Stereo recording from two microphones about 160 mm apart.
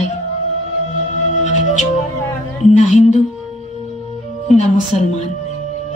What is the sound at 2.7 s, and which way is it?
Speech, 50° left (ahead or behind).